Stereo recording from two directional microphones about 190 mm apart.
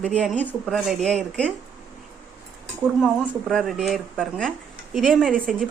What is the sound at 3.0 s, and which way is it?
Speech, centre (ahead or behind).